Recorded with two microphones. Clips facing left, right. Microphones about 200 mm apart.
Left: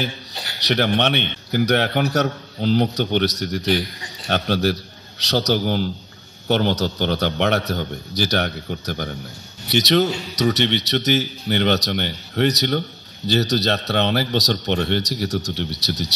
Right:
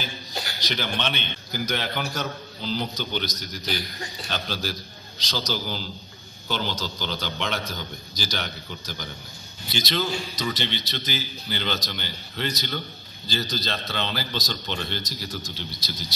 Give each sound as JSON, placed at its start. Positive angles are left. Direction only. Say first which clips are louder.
{"t": 0.7, "sound": "a man's voice", "louder": "left 11 dB", "side_deg": 65}
{"t": 9.7, "sound": "a man's voice", "louder": "left 9 dB", "side_deg": 70}